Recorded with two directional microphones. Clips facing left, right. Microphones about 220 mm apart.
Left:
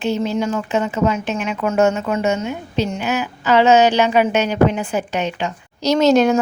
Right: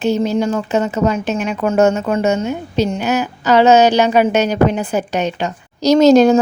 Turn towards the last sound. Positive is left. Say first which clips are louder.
# right 5 dB
turn(degrees=-40)  # may be behind; listen again after turning